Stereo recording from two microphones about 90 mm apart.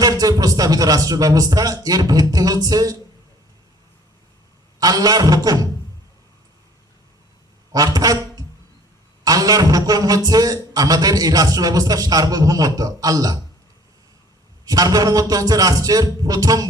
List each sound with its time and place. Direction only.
0.0 s a man's voice: 45° right (ahead or behind)
4.8 s a man's voice: 45° right (ahead or behind)
7.7 s a sound: 45° right (ahead or behind)
9.2 s a man's voice: 45° right (ahead or behind)
14.6 s a man's voice: 45° right (ahead or behind)